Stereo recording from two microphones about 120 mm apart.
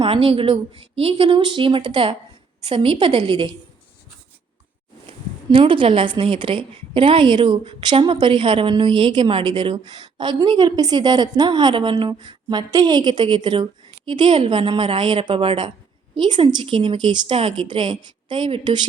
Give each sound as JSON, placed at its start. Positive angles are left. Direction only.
{"t": 0.0, "sound": "speech", "side_deg": -50}
{"t": 5.0, "sound": "a woman's voice", "side_deg": -45}